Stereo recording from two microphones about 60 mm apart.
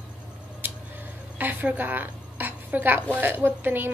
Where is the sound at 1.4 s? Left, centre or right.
Right.